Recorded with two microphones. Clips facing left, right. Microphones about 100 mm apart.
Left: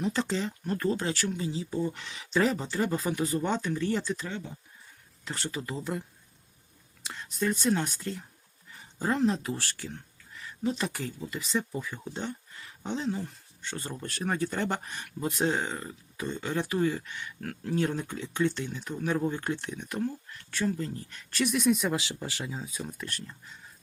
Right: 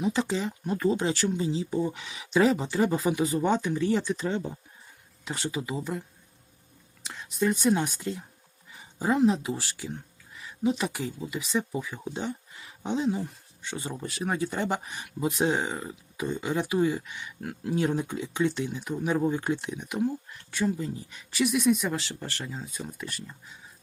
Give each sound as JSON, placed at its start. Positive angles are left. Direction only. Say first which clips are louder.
{"t": 0.0, "sound": "speech", "louder": "right 2 dB", "side_deg": -15}
{"t": 4.3, "sound": "speech", "louder": "right 8 dB", "side_deg": -30}
{"t": 5.2, "sound": "speech", "louder": "right 3 dB", "side_deg": -15}
{"t": 7.0, "sound": "speech", "louder": "right 3 dB", "side_deg": 0}